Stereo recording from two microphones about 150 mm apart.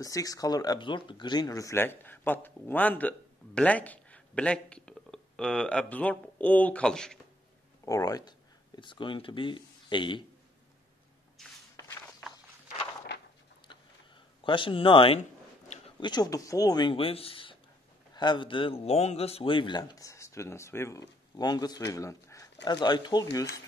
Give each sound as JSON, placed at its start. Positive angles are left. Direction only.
{"t": 0.0, "sound": "speech", "side_deg": 25}
{"t": 7.8, "sound": "speech", "side_deg": 25}
{"t": 11.4, "sound": "shuffle", "side_deg": 5}
{"t": 14.4, "sound": "a man's voice", "side_deg": 35}